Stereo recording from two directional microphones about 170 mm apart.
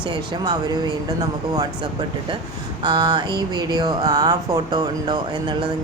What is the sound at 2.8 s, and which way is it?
Speech, 25° right (ahead or behind).